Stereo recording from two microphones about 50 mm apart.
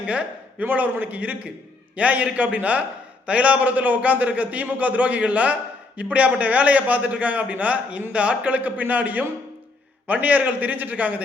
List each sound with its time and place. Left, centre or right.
0.0 s a man's voice: right
0.6 s a man's voice: right